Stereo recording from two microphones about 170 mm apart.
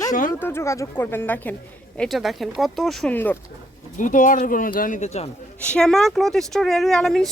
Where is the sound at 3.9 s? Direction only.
50° left (ahead or behind).